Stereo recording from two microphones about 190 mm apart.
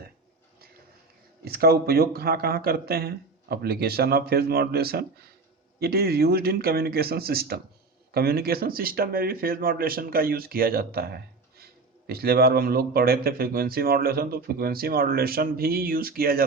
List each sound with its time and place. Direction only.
1.5 s speech: 55° right (ahead or behind)